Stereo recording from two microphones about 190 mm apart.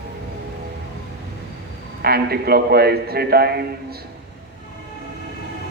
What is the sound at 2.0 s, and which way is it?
A man's voice, 55° right (ahead or behind).